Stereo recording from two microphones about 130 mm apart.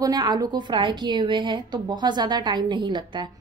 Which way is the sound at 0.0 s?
30° right (ahead or behind).